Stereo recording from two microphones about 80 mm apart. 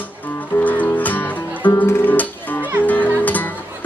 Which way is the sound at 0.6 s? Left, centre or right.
Left.